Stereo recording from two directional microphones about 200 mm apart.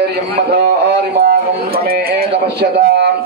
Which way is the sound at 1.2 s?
50° right (ahead or behind).